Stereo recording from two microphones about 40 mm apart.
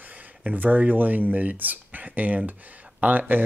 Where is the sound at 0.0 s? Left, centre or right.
Right.